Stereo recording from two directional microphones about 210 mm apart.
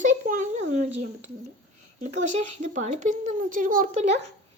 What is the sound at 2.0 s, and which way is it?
A child's voice, 35° right (ahead or behind).